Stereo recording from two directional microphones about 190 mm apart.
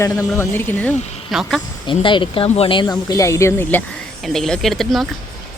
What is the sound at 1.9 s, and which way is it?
Speech, 25° left (ahead or behind).